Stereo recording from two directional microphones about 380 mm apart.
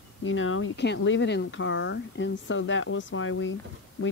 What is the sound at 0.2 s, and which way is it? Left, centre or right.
Speech, left.